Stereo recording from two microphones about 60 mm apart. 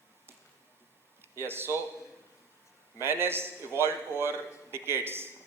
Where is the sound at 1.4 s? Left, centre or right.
Right.